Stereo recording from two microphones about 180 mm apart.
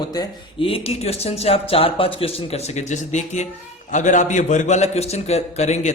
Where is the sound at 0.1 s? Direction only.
25° left (ahead or behind).